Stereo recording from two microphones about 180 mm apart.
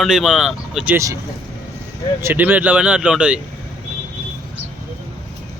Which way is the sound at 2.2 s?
10° right (ahead or behind).